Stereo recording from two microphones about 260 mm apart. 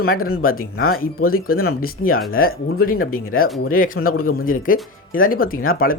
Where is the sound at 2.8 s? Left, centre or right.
Left.